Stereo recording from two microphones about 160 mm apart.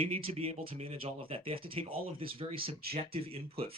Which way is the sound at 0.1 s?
35° right (ahead or behind).